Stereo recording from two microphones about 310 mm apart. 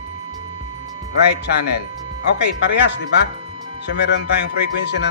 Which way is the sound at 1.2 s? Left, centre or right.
Left.